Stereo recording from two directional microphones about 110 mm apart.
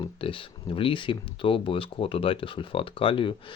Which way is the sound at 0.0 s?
50° left (ahead or behind).